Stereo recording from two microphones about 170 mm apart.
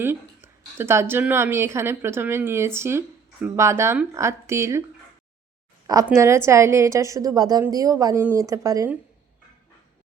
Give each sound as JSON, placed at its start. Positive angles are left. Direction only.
{"t": 0.0, "sound": "a woman's voice", "side_deg": -15}
{"t": 6.1, "sound": "a woman's voice", "side_deg": -15}